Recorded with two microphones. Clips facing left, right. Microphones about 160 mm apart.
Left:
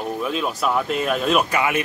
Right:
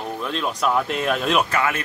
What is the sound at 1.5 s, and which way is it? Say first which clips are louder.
Speech: left 2 dB; 15° left (ahead or behind).